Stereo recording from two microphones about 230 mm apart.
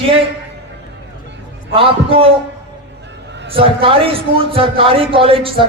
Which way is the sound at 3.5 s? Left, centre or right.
Right.